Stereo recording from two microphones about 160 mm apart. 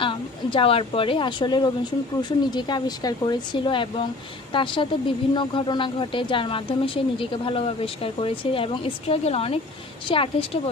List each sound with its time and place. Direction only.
0.0 s a woman's voice: 30° left (ahead or behind)